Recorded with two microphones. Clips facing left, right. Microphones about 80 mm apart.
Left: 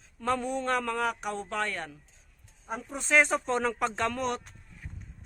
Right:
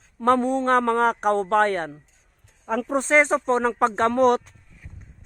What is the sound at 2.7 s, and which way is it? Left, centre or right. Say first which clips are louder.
Speech: right 12 dB; right.